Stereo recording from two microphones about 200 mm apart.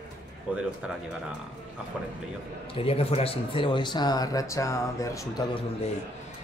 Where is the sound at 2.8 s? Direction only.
30° left (ahead or behind).